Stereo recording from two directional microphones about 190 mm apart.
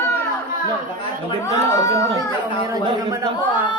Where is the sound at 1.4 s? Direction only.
15° left (ahead or behind).